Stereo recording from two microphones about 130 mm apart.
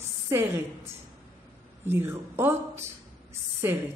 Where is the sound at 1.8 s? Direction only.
20° right (ahead or behind).